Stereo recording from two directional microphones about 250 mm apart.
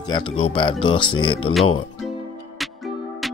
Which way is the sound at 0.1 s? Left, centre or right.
Centre.